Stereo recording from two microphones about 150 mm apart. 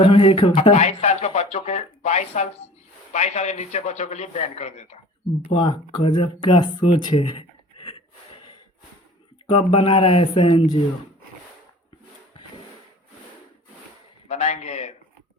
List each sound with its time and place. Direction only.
0.0 s a man's voice: 35° left (ahead or behind)
5.5 s speech: 35° left (ahead or behind)
9.5 s speech: 35° left (ahead or behind)
14.3 s a sound: 50° left (ahead or behind)